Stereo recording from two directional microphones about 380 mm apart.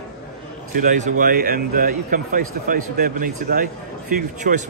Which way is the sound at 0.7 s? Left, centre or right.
Centre.